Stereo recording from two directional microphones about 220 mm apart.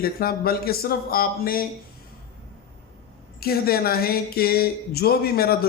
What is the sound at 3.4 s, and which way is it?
Speech, 45° left (ahead or behind).